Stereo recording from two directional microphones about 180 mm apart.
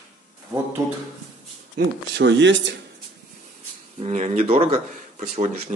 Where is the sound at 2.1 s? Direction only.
85° right.